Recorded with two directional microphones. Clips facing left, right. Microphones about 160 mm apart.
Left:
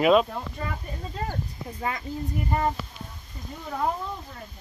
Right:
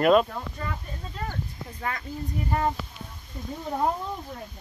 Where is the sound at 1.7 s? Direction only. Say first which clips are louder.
Left 2 dB; 20° left (ahead or behind).